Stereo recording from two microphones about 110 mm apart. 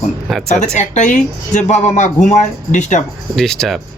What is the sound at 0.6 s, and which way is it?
A man's voice, 90° left.